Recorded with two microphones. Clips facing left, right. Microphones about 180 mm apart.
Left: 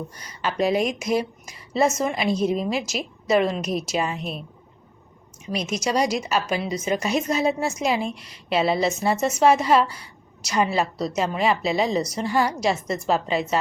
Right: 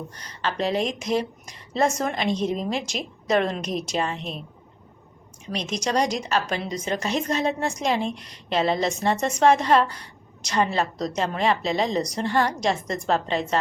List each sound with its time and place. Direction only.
0.1 s a woman's voice: 10° left (ahead or behind)
5.5 s a woman's voice: 5° left (ahead or behind)